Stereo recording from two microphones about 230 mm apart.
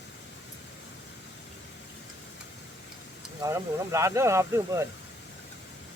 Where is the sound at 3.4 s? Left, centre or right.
Centre.